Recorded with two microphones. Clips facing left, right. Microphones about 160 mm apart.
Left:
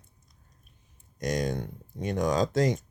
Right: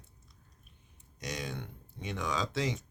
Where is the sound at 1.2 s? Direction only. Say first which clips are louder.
Left 10 dB; 45° left (ahead or behind).